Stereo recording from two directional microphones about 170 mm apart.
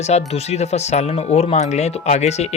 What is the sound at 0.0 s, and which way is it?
Speech, 40° left (ahead or behind).